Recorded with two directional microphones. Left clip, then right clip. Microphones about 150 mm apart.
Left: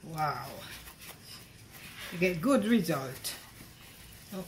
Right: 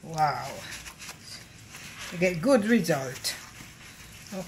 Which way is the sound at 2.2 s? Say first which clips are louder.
Right 5 dB; 20° right (ahead or behind).